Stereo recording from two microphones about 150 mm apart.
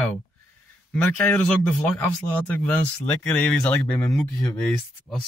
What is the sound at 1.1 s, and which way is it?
Speech, 10° left (ahead or behind).